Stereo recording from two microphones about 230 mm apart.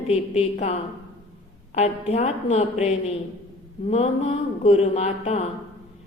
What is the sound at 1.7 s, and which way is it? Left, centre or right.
A woman's voice, left.